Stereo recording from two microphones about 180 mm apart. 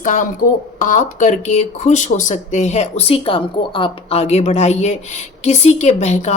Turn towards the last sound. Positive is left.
turn(degrees=40)  # may be behind; listen again after turning